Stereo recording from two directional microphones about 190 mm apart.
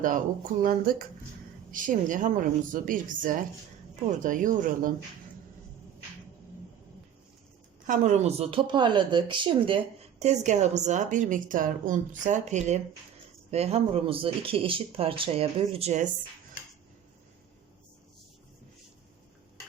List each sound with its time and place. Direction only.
0.6 s a woman's voice: 50° right (ahead or behind)
7.9 s speech: 40° right (ahead or behind)